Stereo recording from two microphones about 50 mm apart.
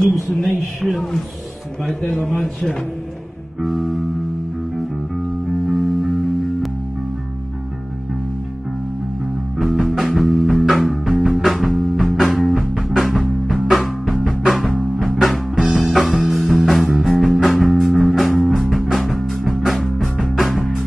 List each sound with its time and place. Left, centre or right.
0.4 s a man's voice: centre
1.8 s speech: centre
3.5 s a man's voice: centre
5.7 s music: centre
9.6 s music: centre
15.5 s music: centre
16.3 s music: centre
18.7 s music: centre